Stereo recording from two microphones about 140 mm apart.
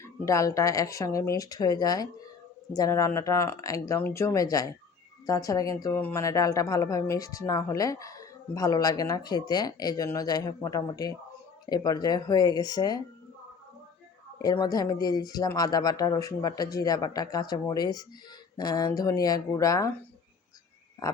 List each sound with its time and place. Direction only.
0.0 s a woman's voice: 25° left (ahead or behind)
14.4 s a woman's voice: 25° left (ahead or behind)